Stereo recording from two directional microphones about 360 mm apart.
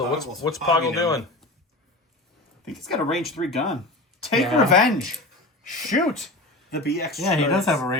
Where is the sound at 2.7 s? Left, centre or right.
Centre.